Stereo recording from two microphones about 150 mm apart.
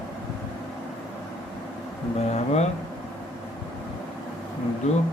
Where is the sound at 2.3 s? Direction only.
45° left (ahead or behind).